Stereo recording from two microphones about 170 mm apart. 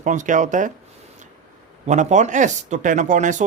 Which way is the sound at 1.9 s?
45° right (ahead or behind).